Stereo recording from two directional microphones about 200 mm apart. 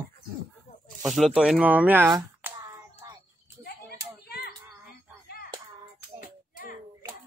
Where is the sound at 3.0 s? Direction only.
15° right (ahead or behind).